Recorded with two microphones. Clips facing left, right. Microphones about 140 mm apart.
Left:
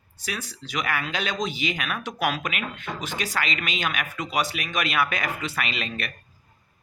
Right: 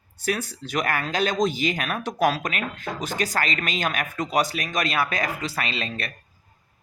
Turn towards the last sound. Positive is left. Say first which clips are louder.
# right 1 dB
turn(degrees=-35)  # may be behind; listen again after turning